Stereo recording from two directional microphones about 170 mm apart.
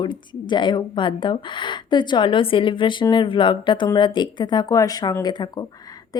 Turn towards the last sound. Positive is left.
turn(degrees=25)  # may be behind; listen again after turning